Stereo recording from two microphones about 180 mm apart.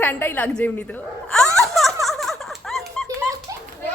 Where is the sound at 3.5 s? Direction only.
20° right (ahead or behind).